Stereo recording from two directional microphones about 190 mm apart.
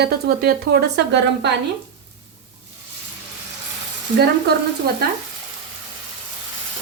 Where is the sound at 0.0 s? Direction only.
60° right (ahead or behind).